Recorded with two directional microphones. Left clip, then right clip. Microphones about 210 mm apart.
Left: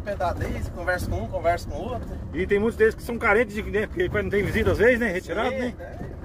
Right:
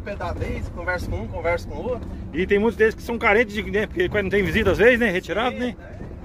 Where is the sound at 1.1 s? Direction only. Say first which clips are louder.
Even; centre (ahead or behind).